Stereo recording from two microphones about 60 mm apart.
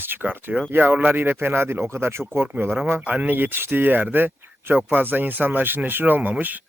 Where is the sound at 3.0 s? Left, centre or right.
Right.